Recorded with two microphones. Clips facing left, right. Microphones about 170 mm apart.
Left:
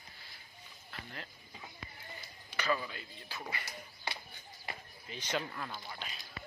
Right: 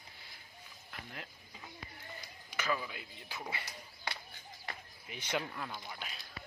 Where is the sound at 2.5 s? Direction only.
5° right (ahead or behind).